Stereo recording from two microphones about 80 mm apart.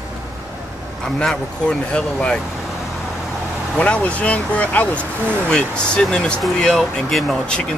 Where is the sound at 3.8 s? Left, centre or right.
Centre.